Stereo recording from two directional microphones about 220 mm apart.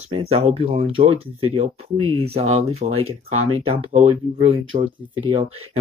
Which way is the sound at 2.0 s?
75° right (ahead or behind).